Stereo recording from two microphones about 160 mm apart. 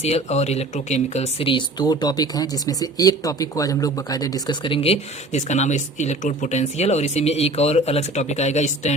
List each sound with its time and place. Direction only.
0.0 s speech: 40° left (ahead or behind)